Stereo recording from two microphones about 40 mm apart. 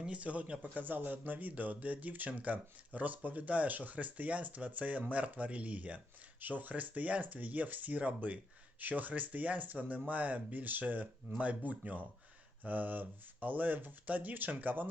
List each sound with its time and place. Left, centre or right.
0.0 s speech: right
0.6 s speech: right